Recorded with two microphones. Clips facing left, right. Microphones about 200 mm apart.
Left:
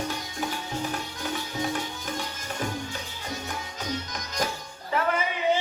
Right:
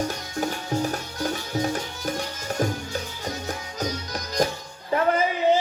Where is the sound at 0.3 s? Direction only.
40° right (ahead or behind).